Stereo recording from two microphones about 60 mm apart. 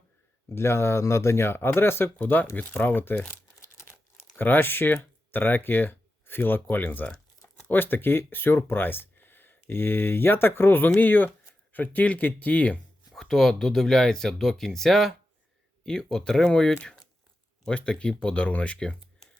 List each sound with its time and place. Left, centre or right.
0.4 s speech: left
2.1 s speech: left
3.6 s crumpling: left
3.9 s crumpling: left
5.3 s speech: left
13.1 s speech: centre